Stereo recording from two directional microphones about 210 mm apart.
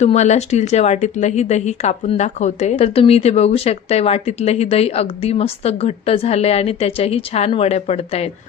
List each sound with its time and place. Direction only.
0.0 s speech: 35° left (ahead or behind)